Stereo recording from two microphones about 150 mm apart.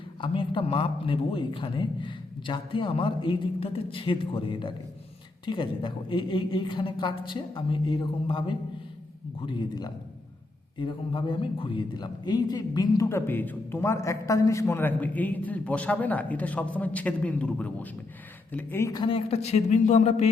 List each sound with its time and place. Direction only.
0.2 s a man's voice: 35° left (ahead or behind)
19.0 s a man's voice: 40° left (ahead or behind)